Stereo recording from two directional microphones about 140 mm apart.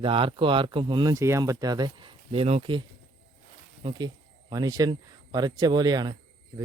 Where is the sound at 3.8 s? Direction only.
35° right (ahead or behind).